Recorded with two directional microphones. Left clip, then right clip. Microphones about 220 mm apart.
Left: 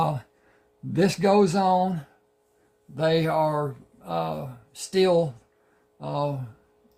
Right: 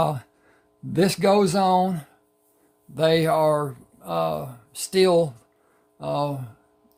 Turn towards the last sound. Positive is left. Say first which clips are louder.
# right 3 dB
turn(degrees=-35)  # may be behind; listen again after turning